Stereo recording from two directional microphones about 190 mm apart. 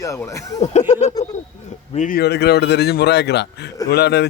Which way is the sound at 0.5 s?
40° left (ahead or behind).